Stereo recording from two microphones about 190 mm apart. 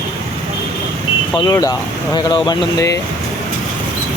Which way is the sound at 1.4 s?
20° left (ahead or behind).